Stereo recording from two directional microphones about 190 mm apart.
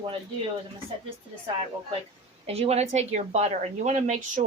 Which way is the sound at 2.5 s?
35° right (ahead or behind).